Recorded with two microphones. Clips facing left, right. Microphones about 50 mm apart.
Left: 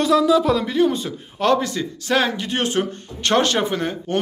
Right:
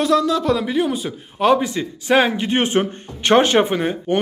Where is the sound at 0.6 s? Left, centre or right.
Centre.